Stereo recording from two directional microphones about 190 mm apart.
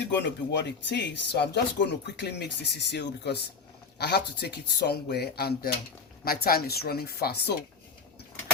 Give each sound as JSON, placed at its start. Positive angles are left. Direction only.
{"t": 0.0, "sound": "a woman's voice", "side_deg": 65}